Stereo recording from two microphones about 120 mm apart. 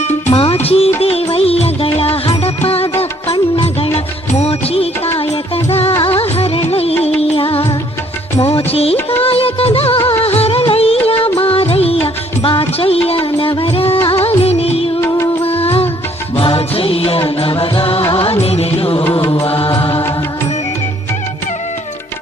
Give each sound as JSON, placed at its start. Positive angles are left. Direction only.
{"t": 0.0, "sound": "music", "side_deg": 70}
{"t": 0.4, "sound": "music", "side_deg": 55}
{"t": 3.2, "sound": "music", "side_deg": 40}
{"t": 3.9, "sound": "music", "side_deg": 60}
{"t": 6.0, "sound": "music", "side_deg": 50}
{"t": 9.2, "sound": "music of bollywood", "side_deg": 50}
{"t": 11.1, "sound": "music", "side_deg": 20}
{"t": 11.3, "sound": "music of bollywood", "side_deg": 50}
{"t": 15.0, "sound": "music", "side_deg": 20}
{"t": 15.4, "sound": "music", "side_deg": 55}
{"t": 19.5, "sound": "mantra", "side_deg": 50}